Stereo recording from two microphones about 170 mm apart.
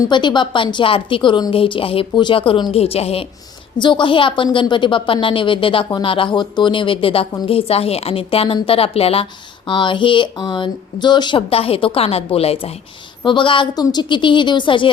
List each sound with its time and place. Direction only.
0.1 s a woman's voice: 25° left (ahead or behind)